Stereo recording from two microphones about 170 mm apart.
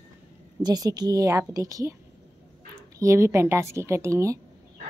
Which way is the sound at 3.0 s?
15° right (ahead or behind).